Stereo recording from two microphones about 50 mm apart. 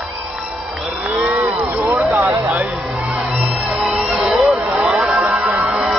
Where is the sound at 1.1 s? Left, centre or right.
Right.